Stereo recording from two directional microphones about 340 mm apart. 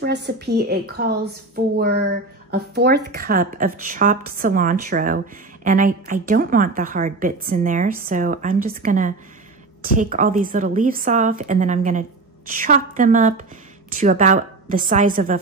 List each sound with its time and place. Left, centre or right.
0.0 s speech: right